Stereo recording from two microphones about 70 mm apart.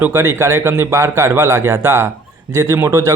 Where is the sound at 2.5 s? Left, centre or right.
Right.